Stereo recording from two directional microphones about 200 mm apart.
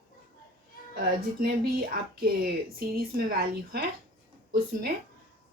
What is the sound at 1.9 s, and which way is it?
A woman's voice, 50° right (ahead or behind).